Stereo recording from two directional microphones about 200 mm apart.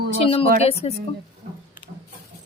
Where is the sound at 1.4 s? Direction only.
35° right (ahead or behind).